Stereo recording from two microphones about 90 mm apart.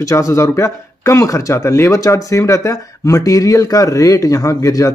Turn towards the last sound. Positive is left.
turn(degrees=40)  # may be behind; listen again after turning